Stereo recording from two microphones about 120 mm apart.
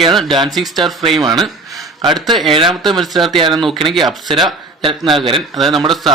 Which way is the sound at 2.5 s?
40° right (ahead or behind).